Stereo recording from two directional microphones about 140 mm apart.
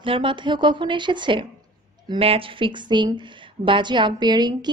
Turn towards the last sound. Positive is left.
turn(degrees=-30)  # may be behind; listen again after turning